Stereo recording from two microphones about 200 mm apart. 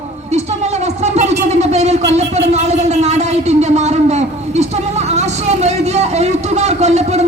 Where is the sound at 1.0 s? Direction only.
35° right (ahead or behind).